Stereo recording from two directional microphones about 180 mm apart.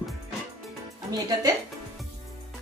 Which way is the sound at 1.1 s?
20° right (ahead or behind).